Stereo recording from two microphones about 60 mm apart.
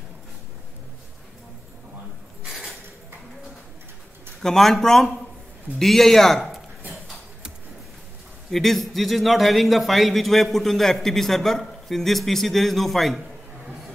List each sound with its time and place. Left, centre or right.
4.4 s a man's voice: centre
8.5 s a man's voice: centre